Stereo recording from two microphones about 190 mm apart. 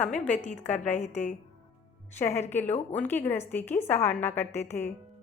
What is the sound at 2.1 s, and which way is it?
A woman's voice, 10° left (ahead or behind).